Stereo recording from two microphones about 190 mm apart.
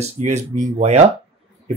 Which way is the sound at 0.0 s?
35° right (ahead or behind).